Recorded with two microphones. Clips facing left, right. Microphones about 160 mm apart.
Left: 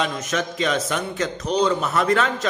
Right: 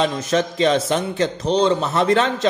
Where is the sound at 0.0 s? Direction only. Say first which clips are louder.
Right 5 dB; 30° right (ahead or behind).